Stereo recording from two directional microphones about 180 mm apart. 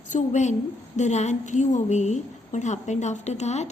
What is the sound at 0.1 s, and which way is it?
A woman's voice, 40° left (ahead or behind).